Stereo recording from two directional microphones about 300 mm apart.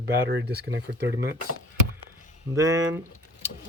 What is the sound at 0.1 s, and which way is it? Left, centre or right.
Speech, right.